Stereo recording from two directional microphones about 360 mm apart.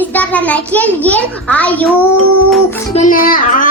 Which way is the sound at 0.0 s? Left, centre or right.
Centre.